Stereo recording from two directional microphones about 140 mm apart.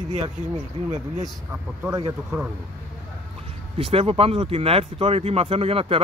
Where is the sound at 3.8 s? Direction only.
45° right (ahead or behind).